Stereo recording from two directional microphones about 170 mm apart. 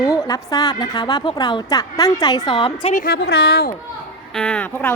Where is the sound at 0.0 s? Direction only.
20° left (ahead or behind).